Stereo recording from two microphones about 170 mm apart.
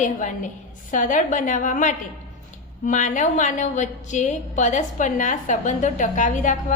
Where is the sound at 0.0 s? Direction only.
45° left (ahead or behind).